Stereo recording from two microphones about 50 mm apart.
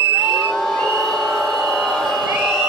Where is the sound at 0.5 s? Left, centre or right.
Centre.